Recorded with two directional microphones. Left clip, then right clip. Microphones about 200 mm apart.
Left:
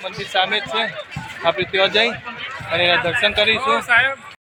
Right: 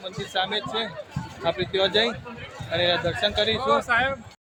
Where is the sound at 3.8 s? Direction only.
55° right (ahead or behind).